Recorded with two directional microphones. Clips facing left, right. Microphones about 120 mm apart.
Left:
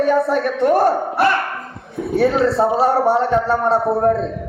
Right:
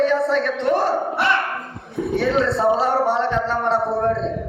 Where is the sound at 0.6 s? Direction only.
45° left (ahead or behind).